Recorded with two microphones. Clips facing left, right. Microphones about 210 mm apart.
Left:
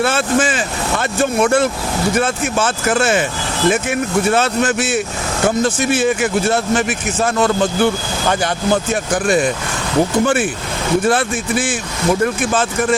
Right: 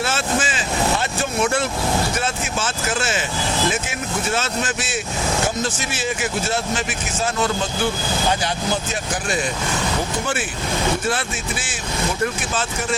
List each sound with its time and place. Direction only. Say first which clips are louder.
0.0 s speech: left 7 dB; 55° left (ahead or behind)
11.1 s speech: left 8 dB; 55° left (ahead or behind)